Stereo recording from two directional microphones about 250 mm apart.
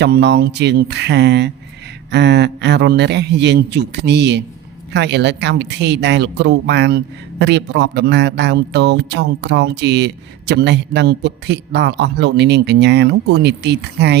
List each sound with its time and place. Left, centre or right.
0.0 s a woman's voice: right